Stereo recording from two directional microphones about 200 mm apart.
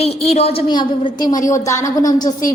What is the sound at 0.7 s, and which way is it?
A woman's voice, 20° left (ahead or behind).